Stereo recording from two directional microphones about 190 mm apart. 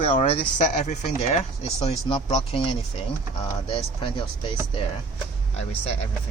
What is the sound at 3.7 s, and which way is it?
Speech, 30° left (ahead or behind).